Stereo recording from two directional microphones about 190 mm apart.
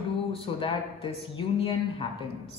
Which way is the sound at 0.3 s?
30° left (ahead or behind).